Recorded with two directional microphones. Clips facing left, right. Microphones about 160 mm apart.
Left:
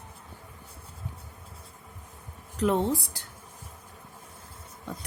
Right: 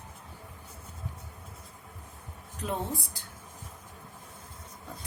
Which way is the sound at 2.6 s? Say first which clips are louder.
Left 9 dB; 80° left.